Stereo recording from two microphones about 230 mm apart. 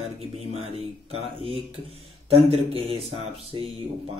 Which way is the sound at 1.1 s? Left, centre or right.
Right.